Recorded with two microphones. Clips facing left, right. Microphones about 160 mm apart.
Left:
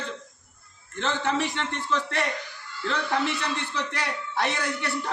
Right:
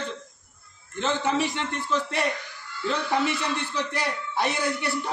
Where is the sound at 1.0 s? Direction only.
15° right (ahead or behind).